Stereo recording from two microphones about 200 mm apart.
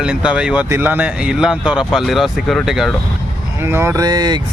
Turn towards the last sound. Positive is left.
turn(degrees=-20)  # may be behind; listen again after turning